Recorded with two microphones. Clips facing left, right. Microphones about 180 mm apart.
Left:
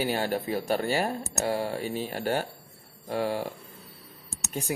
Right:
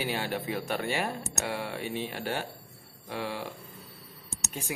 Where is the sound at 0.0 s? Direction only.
40° left (ahead or behind).